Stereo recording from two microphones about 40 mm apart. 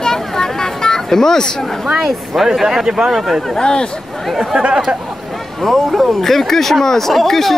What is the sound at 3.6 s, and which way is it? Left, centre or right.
Speech, centre.